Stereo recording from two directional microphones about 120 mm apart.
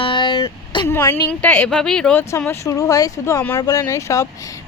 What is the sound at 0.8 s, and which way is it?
A woman's voice, 20° left (ahead or behind).